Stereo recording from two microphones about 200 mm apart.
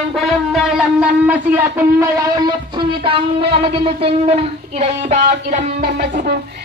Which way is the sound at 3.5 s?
30° right (ahead or behind).